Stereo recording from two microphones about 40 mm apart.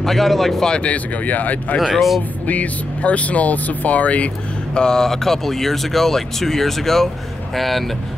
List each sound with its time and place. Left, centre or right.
0.0 s speech: centre
0.7 s speech: left
0.9 s speech: left
2.0 s speech: centre
2.4 s speech: left
4.7 s speech: centre